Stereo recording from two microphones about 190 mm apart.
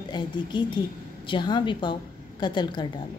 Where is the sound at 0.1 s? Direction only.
25° left (ahead or behind).